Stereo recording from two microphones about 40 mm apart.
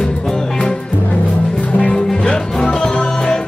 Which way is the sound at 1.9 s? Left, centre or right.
Left.